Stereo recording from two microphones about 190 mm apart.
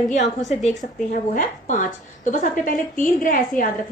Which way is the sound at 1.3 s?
45° left (ahead or behind).